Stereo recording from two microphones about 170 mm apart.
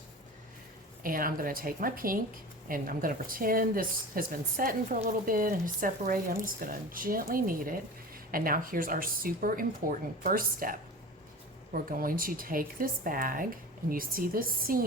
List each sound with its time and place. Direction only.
1.0 s speech: 55° right (ahead or behind)